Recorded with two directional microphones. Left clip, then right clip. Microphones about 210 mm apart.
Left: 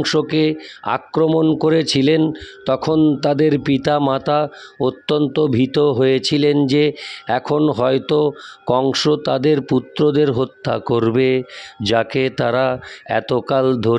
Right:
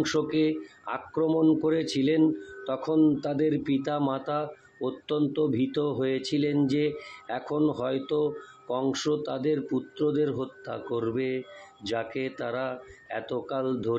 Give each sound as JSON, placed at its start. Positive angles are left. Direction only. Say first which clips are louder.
{"t": 0.0, "sound": "speech", "louder": "left 9 dB", "side_deg": 45}